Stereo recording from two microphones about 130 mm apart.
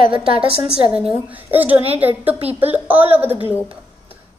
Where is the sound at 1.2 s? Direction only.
15° right (ahead or behind).